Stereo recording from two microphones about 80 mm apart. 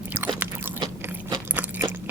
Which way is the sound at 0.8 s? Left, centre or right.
Right.